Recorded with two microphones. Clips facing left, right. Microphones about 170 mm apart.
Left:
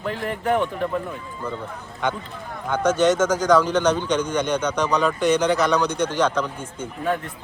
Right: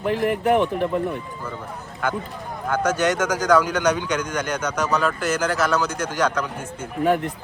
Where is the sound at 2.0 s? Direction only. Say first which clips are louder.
Even; 5° right (ahead or behind).